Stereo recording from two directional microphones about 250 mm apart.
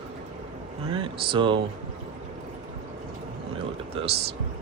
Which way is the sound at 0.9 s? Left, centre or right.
Centre.